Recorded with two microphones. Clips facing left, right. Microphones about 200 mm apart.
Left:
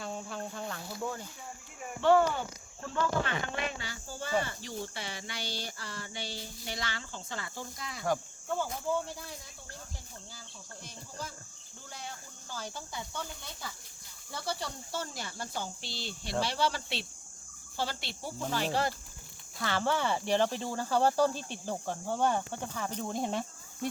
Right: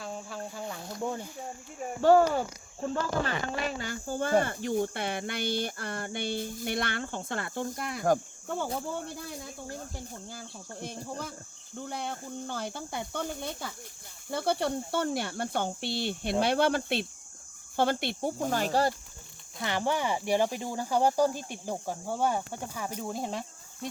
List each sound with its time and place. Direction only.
0.0 s cricket: 5° right (ahead or behind)
1.8 s speech: 40° right (ahead or behind)
19.5 s speech: 15° right (ahead or behind); by 23.4 s centre (ahead or behind)